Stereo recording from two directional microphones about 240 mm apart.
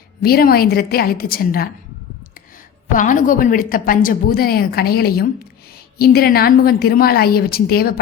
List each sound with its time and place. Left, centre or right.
0.2 s a woman's voice: left
2.8 s a woman's voice: left